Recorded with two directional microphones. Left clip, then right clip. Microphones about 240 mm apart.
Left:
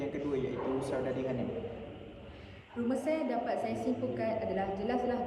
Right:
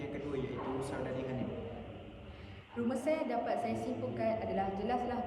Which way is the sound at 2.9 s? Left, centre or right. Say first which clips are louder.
Left 2 dB; centre.